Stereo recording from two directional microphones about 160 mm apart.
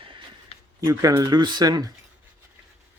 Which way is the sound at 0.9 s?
20° right (ahead or behind).